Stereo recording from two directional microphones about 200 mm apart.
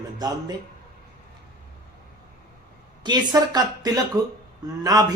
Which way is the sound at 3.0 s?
20° right (ahead or behind).